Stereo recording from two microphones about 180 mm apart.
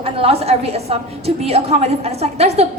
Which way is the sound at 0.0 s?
35° right (ahead or behind).